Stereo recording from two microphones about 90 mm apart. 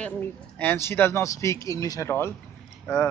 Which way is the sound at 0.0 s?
20° left (ahead or behind).